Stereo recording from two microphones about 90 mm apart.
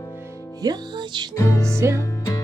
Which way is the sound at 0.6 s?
50° right (ahead or behind).